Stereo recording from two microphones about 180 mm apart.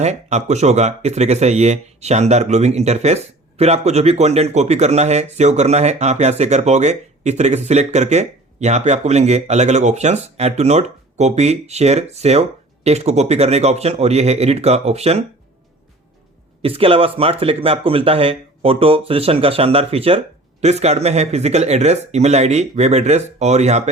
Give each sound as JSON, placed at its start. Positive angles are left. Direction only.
{"t": 0.0, "sound": "speech", "side_deg": -40}
{"t": 16.6, "sound": "speech", "side_deg": -30}